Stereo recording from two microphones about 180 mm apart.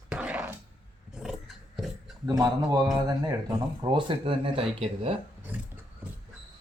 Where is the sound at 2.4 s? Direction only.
20° right (ahead or behind).